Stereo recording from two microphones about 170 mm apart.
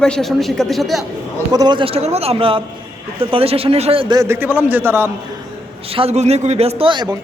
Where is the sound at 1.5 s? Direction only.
25° right (ahead or behind).